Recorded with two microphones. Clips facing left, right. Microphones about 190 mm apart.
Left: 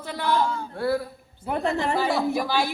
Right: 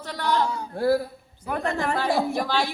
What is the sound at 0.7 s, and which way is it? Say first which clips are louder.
Speech: right 5 dB; 35° right (ahead or behind).